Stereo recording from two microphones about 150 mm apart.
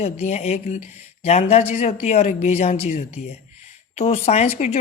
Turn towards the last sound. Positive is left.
turn(degrees=50)  # may be behind; listen again after turning